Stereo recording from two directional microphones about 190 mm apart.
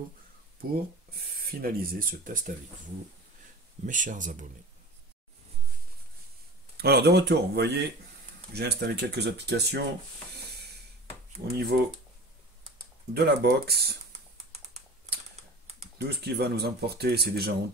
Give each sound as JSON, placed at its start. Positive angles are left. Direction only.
{"t": 0.6, "sound": "speech", "side_deg": -50}
{"t": 3.8, "sound": "speech", "side_deg": -45}
{"t": 6.8, "sound": "speech", "side_deg": -55}
{"t": 10.3, "sound": "a sound", "side_deg": -60}
{"t": 11.5, "sound": "speech", "side_deg": -55}
{"t": 13.1, "sound": "speech", "side_deg": -60}
{"t": 16.0, "sound": "speech", "side_deg": -60}